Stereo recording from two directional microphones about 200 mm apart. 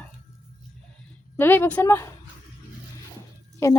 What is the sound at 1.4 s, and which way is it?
Speech, 10° left (ahead or behind).